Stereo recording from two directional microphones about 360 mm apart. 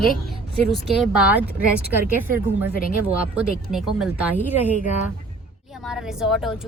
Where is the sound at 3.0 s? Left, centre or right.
Centre.